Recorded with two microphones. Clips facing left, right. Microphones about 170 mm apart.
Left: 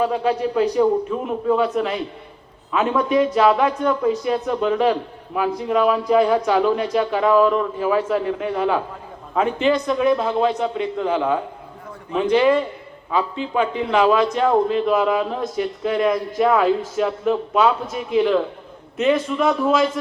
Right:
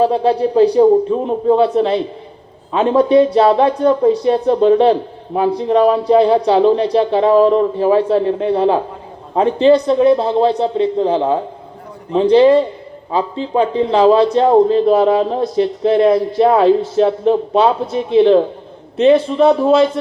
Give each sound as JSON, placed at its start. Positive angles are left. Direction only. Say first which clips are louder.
{"t": 0.0, "sound": "speech", "louder": "right 6 dB", "side_deg": -35}